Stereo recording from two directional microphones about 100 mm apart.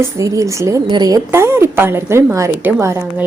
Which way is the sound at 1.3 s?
25° right (ahead or behind).